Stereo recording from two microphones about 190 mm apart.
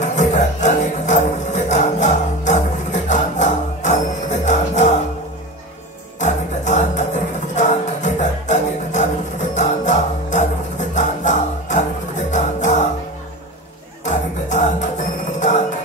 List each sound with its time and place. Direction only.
0.0 s music: 40° left (ahead or behind)
6.1 s music: 40° left (ahead or behind)
14.0 s music: 40° left (ahead or behind)